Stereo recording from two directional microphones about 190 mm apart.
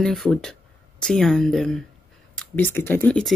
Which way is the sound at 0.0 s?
Centre (ahead or behind).